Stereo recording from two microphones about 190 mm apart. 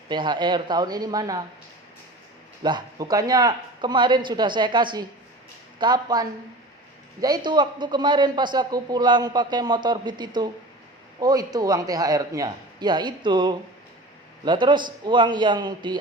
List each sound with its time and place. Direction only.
0.1 s a man's voice: 25° right (ahead or behind)
2.6 s a man's voice: 20° right (ahead or behind)